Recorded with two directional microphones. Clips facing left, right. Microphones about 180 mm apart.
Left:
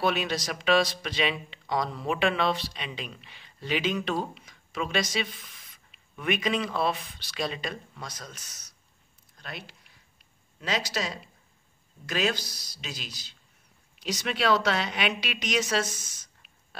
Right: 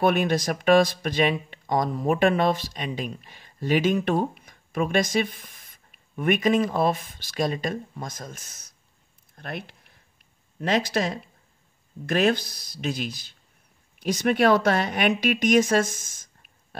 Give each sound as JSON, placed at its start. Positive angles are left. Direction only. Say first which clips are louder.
{"t": 0.0, "sound": "speech", "louder": "right 6 dB", "side_deg": -55}